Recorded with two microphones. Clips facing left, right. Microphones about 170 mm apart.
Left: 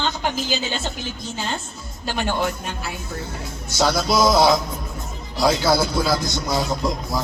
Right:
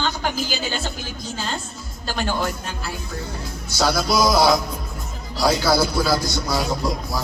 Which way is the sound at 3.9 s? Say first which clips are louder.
Left 1 dB; 20° left (ahead or behind).